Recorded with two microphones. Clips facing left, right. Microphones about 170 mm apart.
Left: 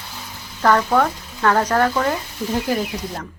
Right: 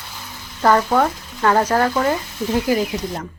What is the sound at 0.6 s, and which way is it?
A woman's voice, 10° right (ahead or behind).